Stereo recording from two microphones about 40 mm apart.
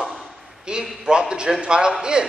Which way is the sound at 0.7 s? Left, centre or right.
Right.